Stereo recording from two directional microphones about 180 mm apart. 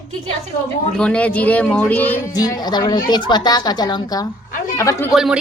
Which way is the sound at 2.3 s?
20° left (ahead or behind).